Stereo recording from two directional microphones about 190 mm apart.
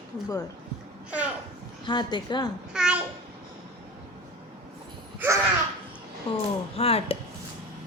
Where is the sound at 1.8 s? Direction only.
25° left (ahead or behind).